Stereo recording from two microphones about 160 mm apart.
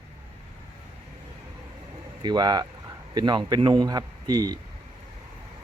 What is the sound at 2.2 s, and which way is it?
Speech, 25° right (ahead or behind).